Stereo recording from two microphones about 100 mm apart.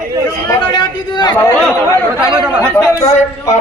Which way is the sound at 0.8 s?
50° left (ahead or behind).